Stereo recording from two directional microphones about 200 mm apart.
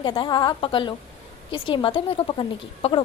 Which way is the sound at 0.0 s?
20° left (ahead or behind).